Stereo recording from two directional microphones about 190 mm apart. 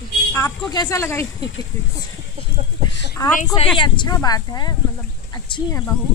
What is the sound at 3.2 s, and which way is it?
A woman's voice, 20° left (ahead or behind).